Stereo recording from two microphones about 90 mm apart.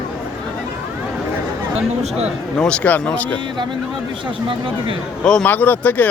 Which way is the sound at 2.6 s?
10° left (ahead or behind).